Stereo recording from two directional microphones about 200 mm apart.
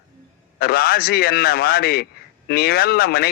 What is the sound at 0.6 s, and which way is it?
A man's voice, 50° left (ahead or behind).